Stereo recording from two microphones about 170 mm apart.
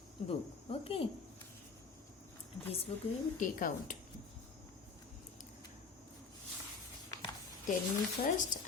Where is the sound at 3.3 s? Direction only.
55° left (ahead or behind).